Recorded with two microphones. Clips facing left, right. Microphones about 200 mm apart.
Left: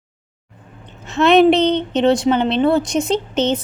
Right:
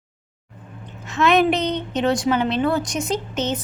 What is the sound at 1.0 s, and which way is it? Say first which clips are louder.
A woman's voice: left 6 dB; 30° left (ahead or behind).